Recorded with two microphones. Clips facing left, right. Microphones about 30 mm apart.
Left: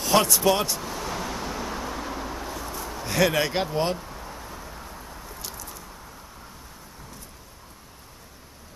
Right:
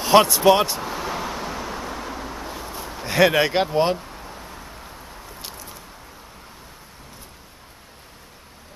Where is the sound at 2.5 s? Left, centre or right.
Right.